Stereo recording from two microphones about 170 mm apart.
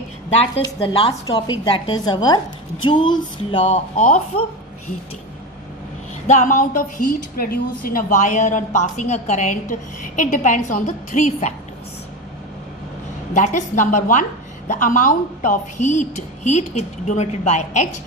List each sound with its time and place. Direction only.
0.6 s a woman's voice: 30° left (ahead or behind)
3.6 s a woman's voice: 45° left (ahead or behind)
6.2 s a woman's voice: 45° left (ahead or behind)
13.3 s a woman's voice: 45° left (ahead or behind)